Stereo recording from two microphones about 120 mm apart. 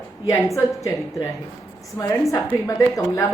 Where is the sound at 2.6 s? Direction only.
25° left (ahead or behind).